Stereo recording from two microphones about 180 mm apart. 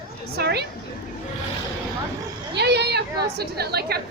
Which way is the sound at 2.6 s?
65° right (ahead or behind).